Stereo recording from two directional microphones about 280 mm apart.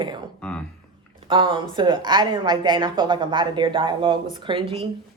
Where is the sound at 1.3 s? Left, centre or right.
Centre.